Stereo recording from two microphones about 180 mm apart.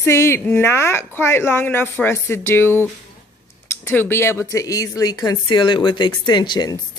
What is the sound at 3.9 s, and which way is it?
A woman's voice, 10° left (ahead or behind).